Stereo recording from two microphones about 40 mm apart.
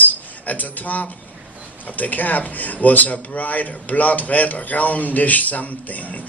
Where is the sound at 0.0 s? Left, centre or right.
Left.